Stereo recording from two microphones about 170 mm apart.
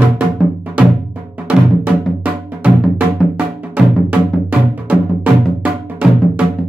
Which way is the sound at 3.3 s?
10° right (ahead or behind).